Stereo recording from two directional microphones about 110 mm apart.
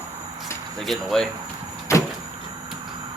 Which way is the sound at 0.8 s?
Centre (ahead or behind).